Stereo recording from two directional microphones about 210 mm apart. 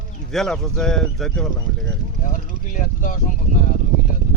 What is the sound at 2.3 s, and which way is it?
Speech, 40° left (ahead or behind).